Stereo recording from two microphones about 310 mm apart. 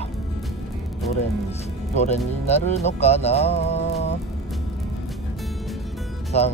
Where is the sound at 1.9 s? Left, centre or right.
Left.